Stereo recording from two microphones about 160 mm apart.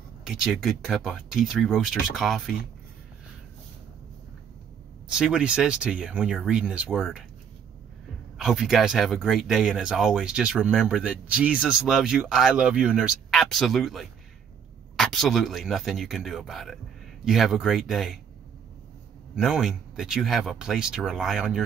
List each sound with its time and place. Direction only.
0.2 s speech: centre (ahead or behind)
5.1 s speech: 5° right (ahead or behind)
8.4 s speech: centre (ahead or behind)
19.3 s speech: centre (ahead or behind)